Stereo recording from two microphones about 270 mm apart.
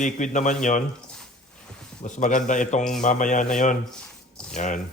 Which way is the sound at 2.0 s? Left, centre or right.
Left.